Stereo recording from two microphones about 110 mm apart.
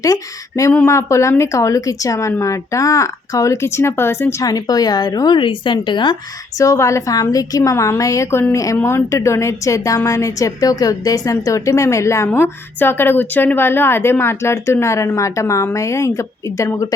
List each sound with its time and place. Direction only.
0.0 s a woman's voice: 30° left (ahead or behind)
4.4 s speech: 35° left (ahead or behind)
6.6 s a woman's voice: 30° left (ahead or behind)